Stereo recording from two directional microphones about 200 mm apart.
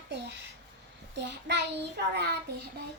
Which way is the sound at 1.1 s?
60° right (ahead or behind).